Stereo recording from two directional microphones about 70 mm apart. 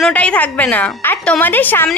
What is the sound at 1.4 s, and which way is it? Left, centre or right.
Speech, left.